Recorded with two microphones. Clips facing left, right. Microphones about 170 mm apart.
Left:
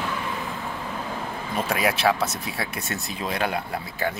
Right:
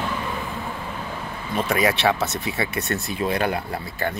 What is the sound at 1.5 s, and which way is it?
Speech, centre (ahead or behind).